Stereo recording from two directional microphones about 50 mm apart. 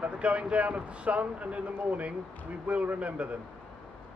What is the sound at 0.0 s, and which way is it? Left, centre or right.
Speech, right.